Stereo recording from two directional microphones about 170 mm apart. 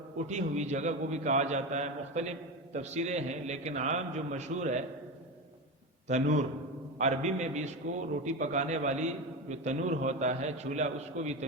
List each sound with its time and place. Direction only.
0.3 s a man's voice: 45° right (ahead or behind)
6.1 s a man's voice: 45° right (ahead or behind)